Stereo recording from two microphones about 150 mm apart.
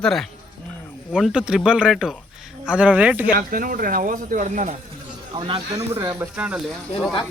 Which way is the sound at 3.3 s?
70° right (ahead or behind).